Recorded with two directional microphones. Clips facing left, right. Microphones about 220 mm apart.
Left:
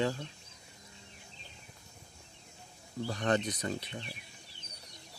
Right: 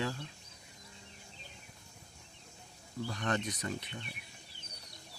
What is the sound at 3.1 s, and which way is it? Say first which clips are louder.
Speech: left 5 dB; 35° left (ahead or behind).